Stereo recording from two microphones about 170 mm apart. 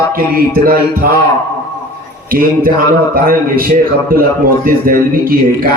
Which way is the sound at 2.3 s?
55° right (ahead or behind).